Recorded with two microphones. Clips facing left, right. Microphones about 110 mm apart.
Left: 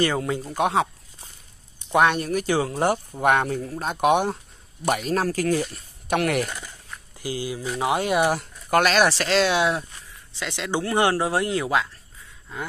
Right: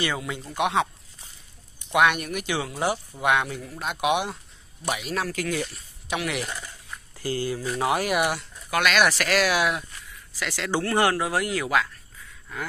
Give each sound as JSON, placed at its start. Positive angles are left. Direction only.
{"t": 0.0, "sound": "speech", "side_deg": 40}
{"t": 0.6, "sound": "a sound", "side_deg": 40}
{"t": 1.9, "sound": "speech", "side_deg": 30}
{"t": 5.8, "sound": "speech", "side_deg": 50}
{"t": 7.2, "sound": "speech", "side_deg": 15}
{"t": 8.4, "sound": "speech", "side_deg": 45}